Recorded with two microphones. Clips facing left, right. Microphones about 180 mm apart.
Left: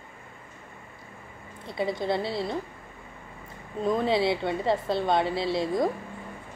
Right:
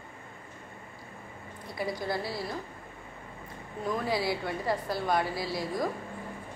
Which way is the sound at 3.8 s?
25° left (ahead or behind).